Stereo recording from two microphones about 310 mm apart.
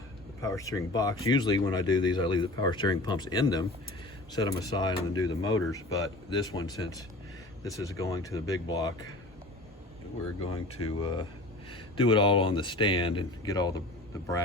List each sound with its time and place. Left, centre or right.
0.4 s speech: centre
10.4 s speech: centre